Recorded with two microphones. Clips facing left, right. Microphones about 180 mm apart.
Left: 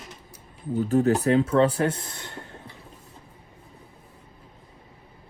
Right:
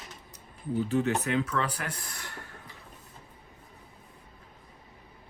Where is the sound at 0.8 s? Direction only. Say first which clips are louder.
Left 8 dB; 40° left (ahead or behind); by 2.6 s 20° left (ahead or behind).